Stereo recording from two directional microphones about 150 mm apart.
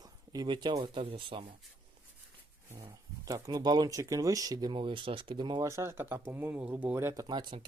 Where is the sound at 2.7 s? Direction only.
25° right (ahead or behind).